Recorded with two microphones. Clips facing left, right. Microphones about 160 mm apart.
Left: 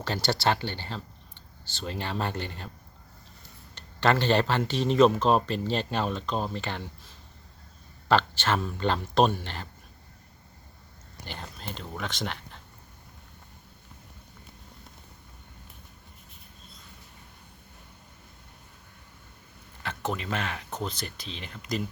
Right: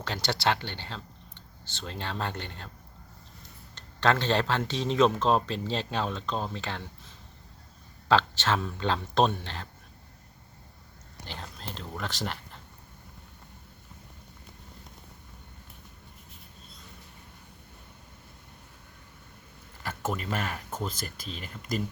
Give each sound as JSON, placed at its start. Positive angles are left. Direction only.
{"t": 0.0, "sound": "speech", "side_deg": 5}
{"t": 3.8, "sound": "speech", "side_deg": 5}
{"t": 8.0, "sound": "speech", "side_deg": 0}
{"t": 11.3, "sound": "speech", "side_deg": 0}
{"t": 19.9, "sound": "a sound", "side_deg": -5}
{"t": 20.7, "sound": "speech", "side_deg": -5}
{"t": 21.0, "sound": "speech", "side_deg": -45}